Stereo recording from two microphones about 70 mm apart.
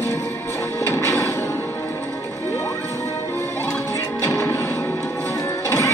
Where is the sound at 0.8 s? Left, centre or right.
Left.